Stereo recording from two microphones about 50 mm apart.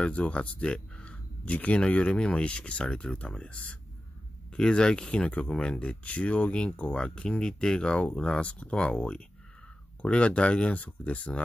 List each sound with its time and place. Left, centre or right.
0.0 s speech: left